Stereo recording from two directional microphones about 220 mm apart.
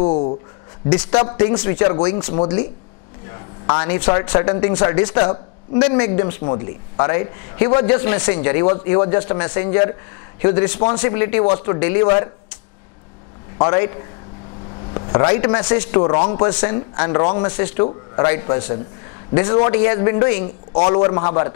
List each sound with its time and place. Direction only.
0.0 s a sound: 30° left (ahead or behind)
1.6 s a man's voice: 15° left (ahead or behind)
3.3 s a sound: 20° left (ahead or behind)
4.1 s a man's voice: 20° left (ahead or behind)
6.4 s a man's voice: 25° left (ahead or behind)
13.6 s a man's voice: 20° left (ahead or behind)
15.0 s a man's voice: 25° left (ahead or behind)
20.7 s a man's voice: 30° left (ahead or behind)